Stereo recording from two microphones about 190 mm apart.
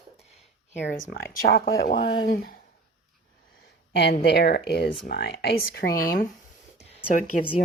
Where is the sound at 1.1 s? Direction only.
55° left (ahead or behind).